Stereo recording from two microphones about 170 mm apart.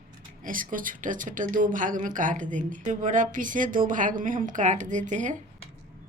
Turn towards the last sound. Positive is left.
turn(degrees=-45)  # may be behind; listen again after turning